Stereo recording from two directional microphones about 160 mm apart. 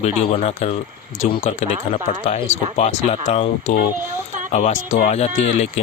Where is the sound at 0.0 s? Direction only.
40° left (ahead or behind).